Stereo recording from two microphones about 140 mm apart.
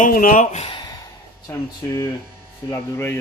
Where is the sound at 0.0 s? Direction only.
85° left.